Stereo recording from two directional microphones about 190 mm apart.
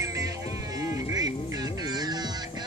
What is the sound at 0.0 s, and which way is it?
Music, 15° right (ahead or behind).